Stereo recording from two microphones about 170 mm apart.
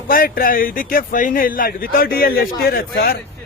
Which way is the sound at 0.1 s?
55° left (ahead or behind).